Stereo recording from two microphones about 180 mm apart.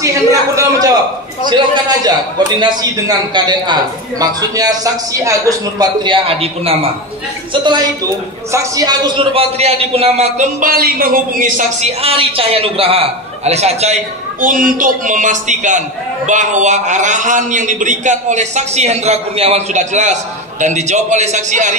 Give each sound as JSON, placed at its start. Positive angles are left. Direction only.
{"t": 0.0, "sound": "a sound", "side_deg": -20}
{"t": 1.5, "sound": "a man's voice", "side_deg": -25}
{"t": 6.2, "sound": "a man's voice", "side_deg": -35}
{"t": 12.0, "sound": "a man's voice", "side_deg": -30}
{"t": 14.4, "sound": "a man's voice", "side_deg": -50}